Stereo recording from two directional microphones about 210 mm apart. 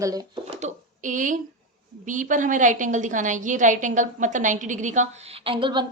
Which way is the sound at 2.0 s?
35° right (ahead or behind).